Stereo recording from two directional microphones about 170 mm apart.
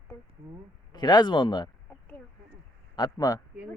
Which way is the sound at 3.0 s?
20° left (ahead or behind).